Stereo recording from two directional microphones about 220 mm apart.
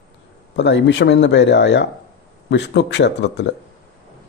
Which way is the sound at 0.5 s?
55° left (ahead or behind).